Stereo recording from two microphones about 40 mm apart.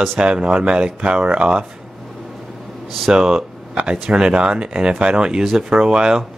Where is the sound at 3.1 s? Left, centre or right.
Centre.